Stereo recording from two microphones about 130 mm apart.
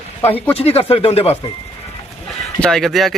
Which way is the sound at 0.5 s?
50° left (ahead or behind).